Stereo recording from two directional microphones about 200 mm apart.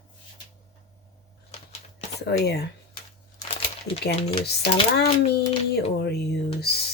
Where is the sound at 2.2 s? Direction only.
55° left (ahead or behind).